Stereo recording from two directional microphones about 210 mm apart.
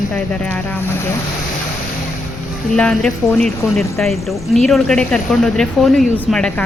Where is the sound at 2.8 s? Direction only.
5° left (ahead or behind).